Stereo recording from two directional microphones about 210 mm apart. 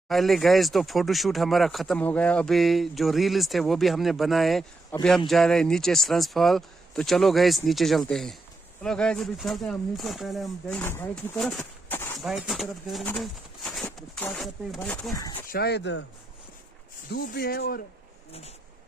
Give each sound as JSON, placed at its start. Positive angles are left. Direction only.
{"t": 0.1, "sound": "speech", "side_deg": 0}
{"t": 10.8, "sound": "speech", "side_deg": 10}
{"t": 12.2, "sound": "speech", "side_deg": 0}
{"t": 15.1, "sound": "speech", "side_deg": 15}
{"t": 15.4, "sound": "speech", "side_deg": 50}
{"t": 17.1, "sound": "speech", "side_deg": 50}